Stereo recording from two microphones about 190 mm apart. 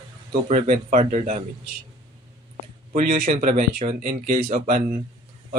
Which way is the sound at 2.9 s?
45° right (ahead or behind).